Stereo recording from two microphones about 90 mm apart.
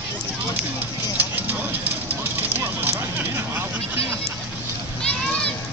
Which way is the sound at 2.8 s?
20° right (ahead or behind).